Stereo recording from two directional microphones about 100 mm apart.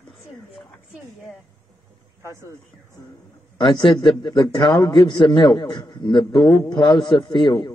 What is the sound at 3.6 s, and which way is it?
A man's voice, 55° left (ahead or behind).